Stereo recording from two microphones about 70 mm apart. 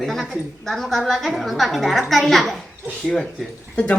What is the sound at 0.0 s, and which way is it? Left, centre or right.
A woman's voice, centre.